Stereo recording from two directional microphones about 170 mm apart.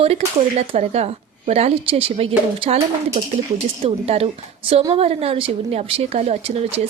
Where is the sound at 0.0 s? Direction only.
35° right (ahead or behind).